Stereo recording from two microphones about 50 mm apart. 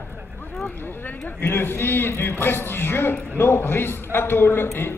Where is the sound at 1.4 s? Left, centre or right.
Left.